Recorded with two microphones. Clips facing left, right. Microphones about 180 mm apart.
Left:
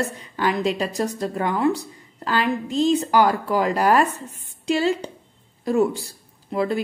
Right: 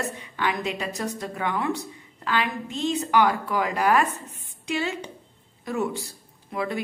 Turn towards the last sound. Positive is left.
turn(degrees=30)  # may be behind; listen again after turning